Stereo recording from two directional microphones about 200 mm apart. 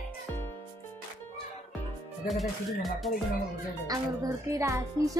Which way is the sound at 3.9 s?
15° right (ahead or behind).